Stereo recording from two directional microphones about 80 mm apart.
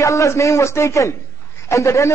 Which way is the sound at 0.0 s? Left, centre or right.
Left.